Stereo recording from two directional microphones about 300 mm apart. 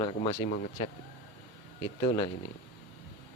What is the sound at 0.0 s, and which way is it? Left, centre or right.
Speech, centre.